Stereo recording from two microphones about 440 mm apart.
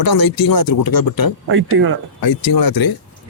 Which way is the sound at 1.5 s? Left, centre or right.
Right.